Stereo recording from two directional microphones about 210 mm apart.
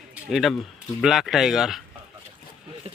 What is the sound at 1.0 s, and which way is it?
Speech, centre (ahead or behind).